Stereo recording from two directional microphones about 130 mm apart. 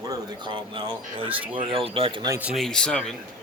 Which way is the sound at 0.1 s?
35° right (ahead or behind).